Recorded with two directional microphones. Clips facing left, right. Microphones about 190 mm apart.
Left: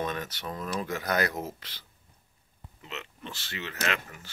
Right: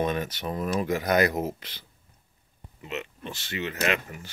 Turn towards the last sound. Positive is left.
turn(degrees=-15)  # may be behind; listen again after turning